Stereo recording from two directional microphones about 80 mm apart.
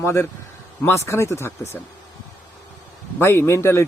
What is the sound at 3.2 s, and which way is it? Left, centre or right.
Speech, left.